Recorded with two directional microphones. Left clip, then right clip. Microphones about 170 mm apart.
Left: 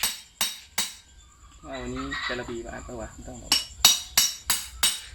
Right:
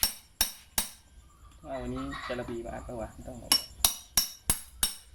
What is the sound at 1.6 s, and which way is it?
Speech, 20° right (ahead or behind).